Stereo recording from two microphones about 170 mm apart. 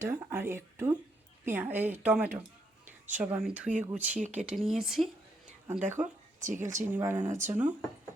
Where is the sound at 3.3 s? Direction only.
10° right (ahead or behind).